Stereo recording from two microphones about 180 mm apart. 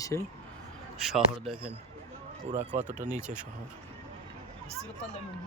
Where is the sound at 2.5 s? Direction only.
40° right (ahead or behind).